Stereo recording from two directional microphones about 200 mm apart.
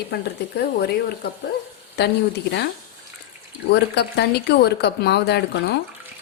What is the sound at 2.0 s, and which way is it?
Speech, 55° left (ahead or behind).